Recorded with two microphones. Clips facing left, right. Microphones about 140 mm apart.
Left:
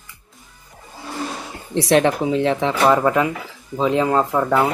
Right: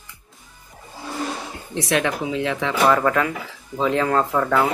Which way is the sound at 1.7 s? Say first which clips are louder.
Left 6 dB; 35° left (ahead or behind).